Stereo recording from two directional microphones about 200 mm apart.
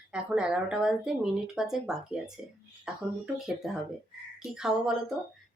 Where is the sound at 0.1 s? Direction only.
5° right (ahead or behind).